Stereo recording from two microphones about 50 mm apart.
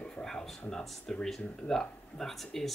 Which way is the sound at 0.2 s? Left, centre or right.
Centre.